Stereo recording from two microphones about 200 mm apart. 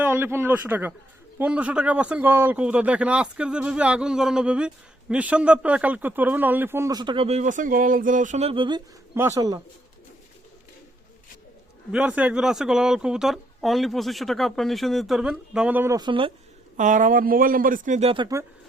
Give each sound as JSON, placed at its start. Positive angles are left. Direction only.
{"t": 0.0, "sound": "speech", "side_deg": -10}
{"t": 9.1, "sound": "speech", "side_deg": -15}
{"t": 11.9, "sound": "speech", "side_deg": -5}
{"t": 16.7, "sound": "speech", "side_deg": -40}